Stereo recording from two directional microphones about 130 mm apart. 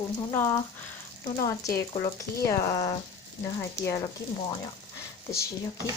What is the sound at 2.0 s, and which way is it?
Speech, 25° left (ahead or behind).